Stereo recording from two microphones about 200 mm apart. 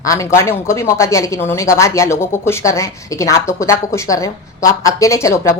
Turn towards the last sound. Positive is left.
turn(degrees=15)  # may be behind; listen again after turning